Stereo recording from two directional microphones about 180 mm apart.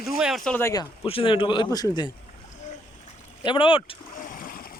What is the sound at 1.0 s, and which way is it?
Speech, 30° left (ahead or behind).